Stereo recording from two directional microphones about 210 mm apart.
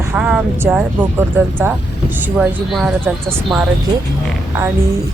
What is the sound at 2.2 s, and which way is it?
Speech, 5° right (ahead or behind).